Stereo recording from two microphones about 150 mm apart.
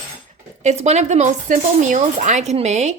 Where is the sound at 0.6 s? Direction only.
50° right (ahead or behind).